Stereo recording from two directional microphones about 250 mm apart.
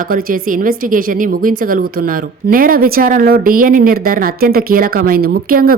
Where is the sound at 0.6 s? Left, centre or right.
Right.